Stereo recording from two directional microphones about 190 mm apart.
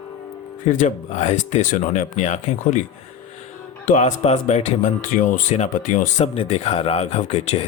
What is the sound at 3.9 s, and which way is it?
Speech, 40° left (ahead or behind).